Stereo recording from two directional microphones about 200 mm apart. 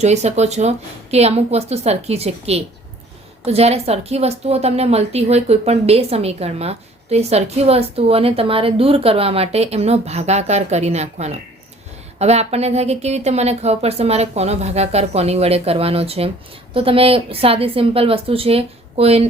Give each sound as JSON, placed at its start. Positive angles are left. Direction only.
{"t": 0.0, "sound": "a woman's voice", "side_deg": -35}